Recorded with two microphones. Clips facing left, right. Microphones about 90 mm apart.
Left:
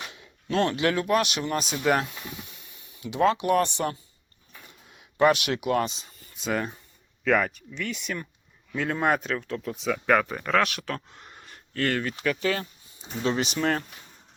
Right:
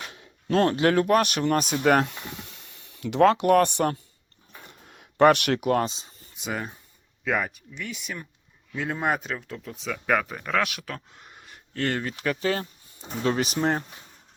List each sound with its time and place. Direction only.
0.1 s speech: 40° right (ahead or behind); by 2.2 s 55° right (ahead or behind)
2.5 s speech: 65° right (ahead or behind)
4.6 s a sound: 50° right (ahead or behind); by 6.1 s 30° right (ahead or behind)
6.3 s speech: 10° right (ahead or behind)
11.7 s speech: 25° right (ahead or behind)
13.0 s speech: 45° right (ahead or behind)
13.7 s speech: 25° right (ahead or behind)